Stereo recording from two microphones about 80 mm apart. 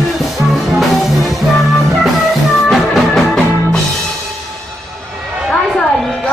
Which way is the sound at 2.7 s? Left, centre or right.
Centre.